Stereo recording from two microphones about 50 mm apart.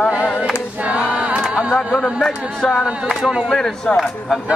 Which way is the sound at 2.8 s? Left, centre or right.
Centre.